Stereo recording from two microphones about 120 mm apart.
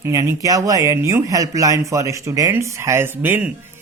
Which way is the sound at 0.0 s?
25° right (ahead or behind).